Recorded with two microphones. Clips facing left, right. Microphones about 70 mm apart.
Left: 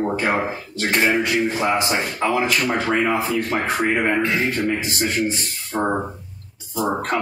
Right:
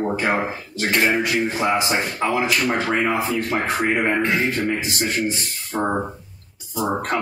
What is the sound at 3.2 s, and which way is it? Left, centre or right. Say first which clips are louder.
Speech: left 1 dB; right.